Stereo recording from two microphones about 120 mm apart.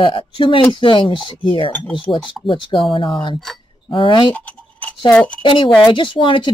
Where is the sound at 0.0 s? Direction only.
45° left (ahead or behind).